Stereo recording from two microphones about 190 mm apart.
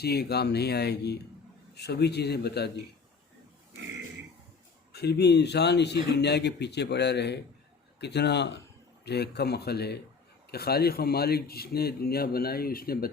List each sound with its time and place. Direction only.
0.0 s speech: 60° left (ahead or behind)
4.9 s speech: 60° left (ahead or behind)